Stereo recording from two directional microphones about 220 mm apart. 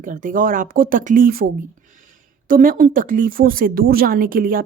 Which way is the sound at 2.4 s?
40° right (ahead or behind).